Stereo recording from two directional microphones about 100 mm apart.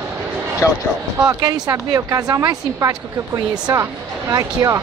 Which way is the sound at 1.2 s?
40° right (ahead or behind).